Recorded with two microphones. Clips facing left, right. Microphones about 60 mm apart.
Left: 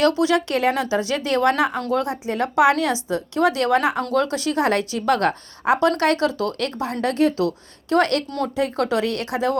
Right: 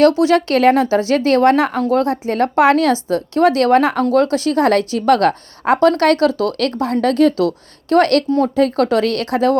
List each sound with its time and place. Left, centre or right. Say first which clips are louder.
0.0 s speech: right 6 dB; right
0.3 s speech: right 7 dB; right
0.8 s speech: right 7 dB; right
7.9 s speech: right 6 dB; right